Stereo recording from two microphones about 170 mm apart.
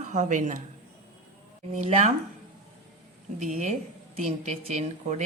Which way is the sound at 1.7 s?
40° right (ahead or behind).